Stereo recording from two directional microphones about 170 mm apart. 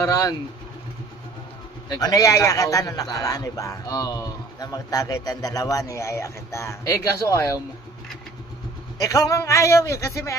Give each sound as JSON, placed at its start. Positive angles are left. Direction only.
{"t": 0.0, "sound": "a man's voice", "side_deg": 20}
{"t": 1.9, "sound": "a man's voice", "side_deg": 20}
{"t": 8.9, "sound": "a man's voice", "side_deg": 20}